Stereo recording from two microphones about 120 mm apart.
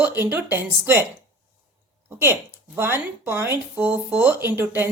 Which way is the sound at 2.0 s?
20° right (ahead or behind).